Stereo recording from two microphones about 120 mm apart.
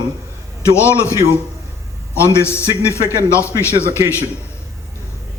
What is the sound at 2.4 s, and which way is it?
A man's voice, 20° left (ahead or behind).